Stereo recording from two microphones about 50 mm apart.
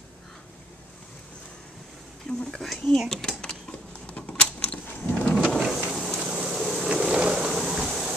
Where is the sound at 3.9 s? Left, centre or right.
Left.